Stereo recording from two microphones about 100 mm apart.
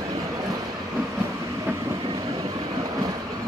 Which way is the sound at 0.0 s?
35° right (ahead or behind).